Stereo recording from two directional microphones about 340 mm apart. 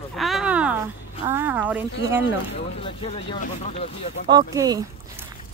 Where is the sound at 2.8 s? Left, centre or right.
Centre.